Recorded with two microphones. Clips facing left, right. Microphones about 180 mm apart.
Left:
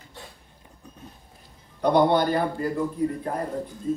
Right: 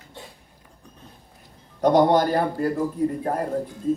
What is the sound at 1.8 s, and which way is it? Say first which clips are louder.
A man's voice: right 2 dB; 45° right (ahead or behind).